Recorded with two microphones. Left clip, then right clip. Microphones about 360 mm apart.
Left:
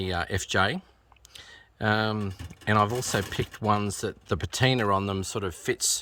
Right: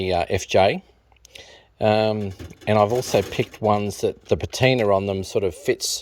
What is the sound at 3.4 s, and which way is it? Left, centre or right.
Speech, left.